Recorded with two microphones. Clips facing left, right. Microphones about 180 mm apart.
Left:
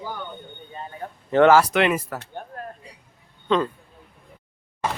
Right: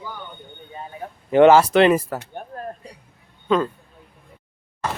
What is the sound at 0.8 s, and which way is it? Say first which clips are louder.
Speech: right 1 dB; 10° right (ahead or behind).